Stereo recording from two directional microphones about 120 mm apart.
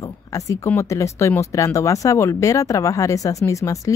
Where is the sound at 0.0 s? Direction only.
30° left (ahead or behind).